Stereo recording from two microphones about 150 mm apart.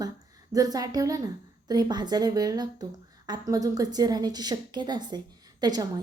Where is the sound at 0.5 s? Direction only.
25° right (ahead or behind).